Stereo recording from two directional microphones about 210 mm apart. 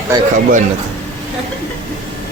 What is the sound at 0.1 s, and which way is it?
Speech, 20° right (ahead or behind).